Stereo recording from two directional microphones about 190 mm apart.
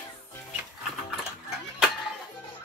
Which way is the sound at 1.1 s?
5° right (ahead or behind).